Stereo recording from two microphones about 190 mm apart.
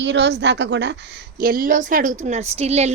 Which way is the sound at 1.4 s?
50° right (ahead or behind).